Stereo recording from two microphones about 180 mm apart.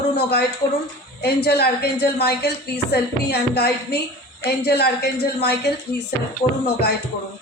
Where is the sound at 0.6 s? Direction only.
20° left (ahead or behind).